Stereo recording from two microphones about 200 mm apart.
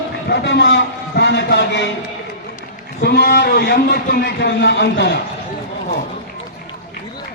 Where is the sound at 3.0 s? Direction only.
55° left (ahead or behind).